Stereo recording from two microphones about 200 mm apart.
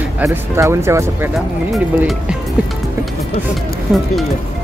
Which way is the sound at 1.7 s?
Centre (ahead or behind).